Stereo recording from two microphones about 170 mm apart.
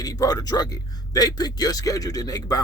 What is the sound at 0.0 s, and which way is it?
Speech, 20° left (ahead or behind).